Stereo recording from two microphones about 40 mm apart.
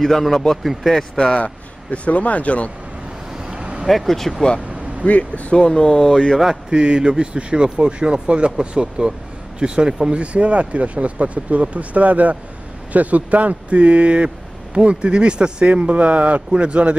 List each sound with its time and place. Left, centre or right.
0.0 s speech: centre
1.1 s speech: left
1.4 s speech: left
3.5 s vehicle: right
3.8 s speech: centre
5.0 s speech: left
5.7 s speech: left
6.7 s speech: right
10.1 s speech: right